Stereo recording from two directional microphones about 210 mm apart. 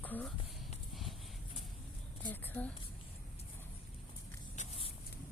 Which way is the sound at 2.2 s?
5° left (ahead or behind).